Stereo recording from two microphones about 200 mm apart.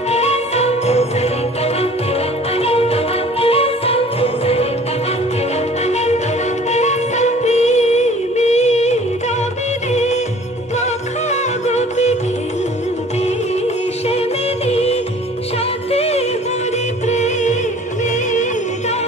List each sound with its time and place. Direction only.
0.1 s music: 30° left (ahead or behind)
2.5 s music: 30° left (ahead or behind)
5.9 s music: 35° left (ahead or behind)
11.2 s music: 35° left (ahead or behind)
14.7 s music: 30° left (ahead or behind)